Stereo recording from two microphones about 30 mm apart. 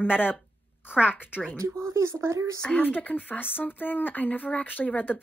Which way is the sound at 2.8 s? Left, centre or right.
Left.